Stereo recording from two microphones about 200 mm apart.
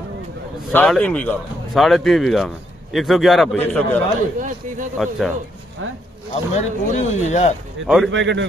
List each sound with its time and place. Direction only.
0.7 s a man's voice: 5° left (ahead or behind)
4.4 s speech: 40° right (ahead or behind)
4.9 s a man's voice: centre (ahead or behind)
6.5 s speech: 35° left (ahead or behind)
7.8 s a man's voice: centre (ahead or behind)
8.1 s a man's voice: 65° right (ahead or behind)